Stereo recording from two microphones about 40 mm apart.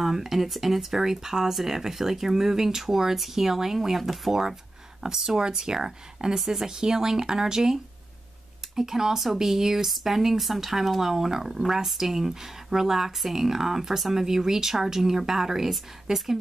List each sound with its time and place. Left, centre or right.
0.0 s speech: centre